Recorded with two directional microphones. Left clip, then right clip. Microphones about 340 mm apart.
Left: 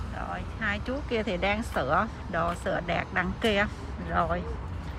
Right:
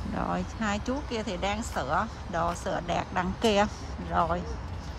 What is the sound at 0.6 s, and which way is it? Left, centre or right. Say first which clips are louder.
Speech: left 4 dB; centre.